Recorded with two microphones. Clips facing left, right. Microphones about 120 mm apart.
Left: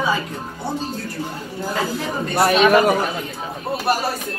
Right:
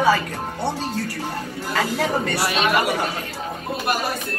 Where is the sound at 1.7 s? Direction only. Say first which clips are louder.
Right 3 dB; 80° right.